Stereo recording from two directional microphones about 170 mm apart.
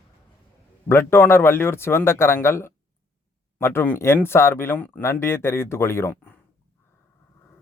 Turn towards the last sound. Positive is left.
turn(degrees=15)  # may be behind; listen again after turning